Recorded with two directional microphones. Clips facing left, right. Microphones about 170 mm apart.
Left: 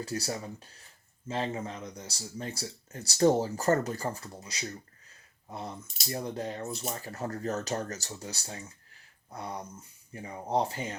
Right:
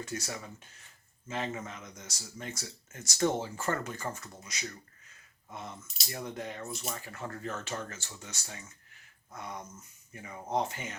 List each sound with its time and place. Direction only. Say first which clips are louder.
0.0 s speech: left 4 dB; 35° left (ahead or behind)